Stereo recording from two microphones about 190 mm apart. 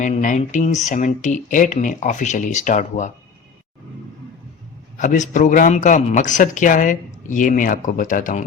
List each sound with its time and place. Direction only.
0.0 s speech: 40° left (ahead or behind)
4.9 s a man's voice: 40° left (ahead or behind)